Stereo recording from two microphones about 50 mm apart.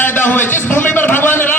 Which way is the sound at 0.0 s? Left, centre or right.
Left.